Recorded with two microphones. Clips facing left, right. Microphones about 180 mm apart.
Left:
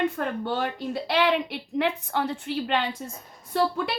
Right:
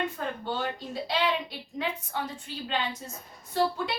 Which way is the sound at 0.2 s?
65° left (ahead or behind).